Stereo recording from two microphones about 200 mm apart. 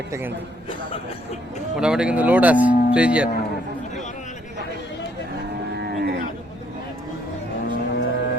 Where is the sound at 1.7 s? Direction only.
5° right (ahead or behind).